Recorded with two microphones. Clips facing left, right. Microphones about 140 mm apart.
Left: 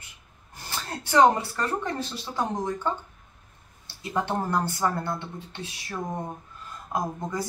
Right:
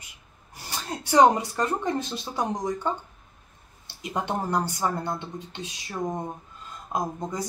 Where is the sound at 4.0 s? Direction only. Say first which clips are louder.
Left 1 dB; 15° right (ahead or behind).